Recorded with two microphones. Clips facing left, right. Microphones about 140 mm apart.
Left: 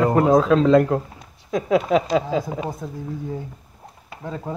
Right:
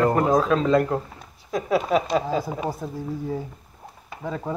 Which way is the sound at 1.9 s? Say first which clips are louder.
Left 2 dB; 90° left.